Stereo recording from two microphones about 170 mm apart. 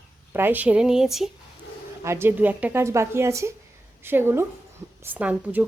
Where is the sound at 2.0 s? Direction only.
15° right (ahead or behind).